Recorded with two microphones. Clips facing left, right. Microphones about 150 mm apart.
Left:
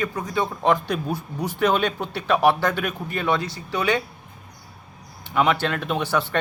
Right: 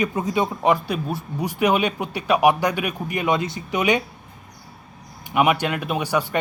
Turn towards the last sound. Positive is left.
turn(degrees=-10)  # may be behind; listen again after turning